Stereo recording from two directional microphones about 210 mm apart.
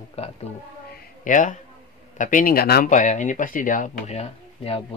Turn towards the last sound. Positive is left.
turn(degrees=30)  # may be behind; listen again after turning